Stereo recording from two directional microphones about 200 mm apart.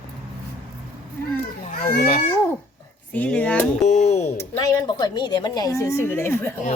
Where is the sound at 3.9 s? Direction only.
35° left (ahead or behind).